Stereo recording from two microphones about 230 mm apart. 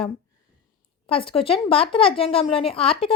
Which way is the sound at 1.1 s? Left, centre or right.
Left.